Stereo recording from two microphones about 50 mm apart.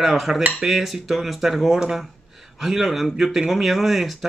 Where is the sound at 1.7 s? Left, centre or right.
Centre.